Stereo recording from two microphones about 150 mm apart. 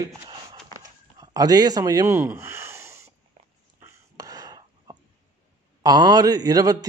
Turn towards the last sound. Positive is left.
turn(degrees=-25)  # may be behind; listen again after turning